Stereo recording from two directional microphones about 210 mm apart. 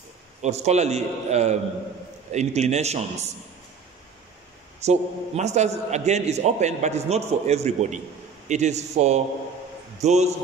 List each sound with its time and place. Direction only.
0.4 s a man's voice: 30° right (ahead or behind)
4.7 s a man's voice: 30° right (ahead or behind)